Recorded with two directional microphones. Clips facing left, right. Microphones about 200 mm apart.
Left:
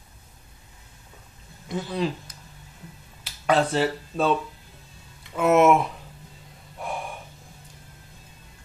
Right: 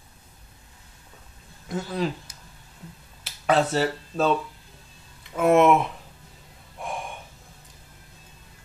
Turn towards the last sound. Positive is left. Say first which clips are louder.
# left 1 dB
turn(degrees=5)  # may be behind; listen again after turning